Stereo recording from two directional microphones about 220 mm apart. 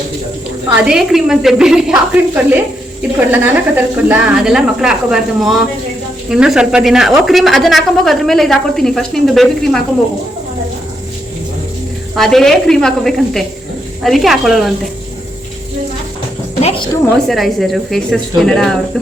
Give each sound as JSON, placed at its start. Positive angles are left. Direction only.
{"t": 0.9, "sound": "speech", "side_deg": 0}
{"t": 12.1, "sound": "speech", "side_deg": 0}
{"t": 16.6, "sound": "a woman's voice", "side_deg": 30}
{"t": 17.2, "sound": "speech", "side_deg": 0}